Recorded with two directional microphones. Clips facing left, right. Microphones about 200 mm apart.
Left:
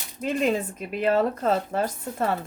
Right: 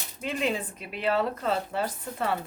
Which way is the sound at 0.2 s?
45° left (ahead or behind).